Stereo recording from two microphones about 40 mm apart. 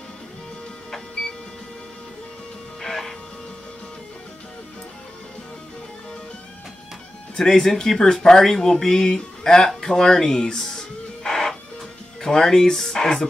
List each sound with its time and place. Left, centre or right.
2.8 s music: centre
7.3 s speech: centre
9.7 s music: centre
12.2 s speech: centre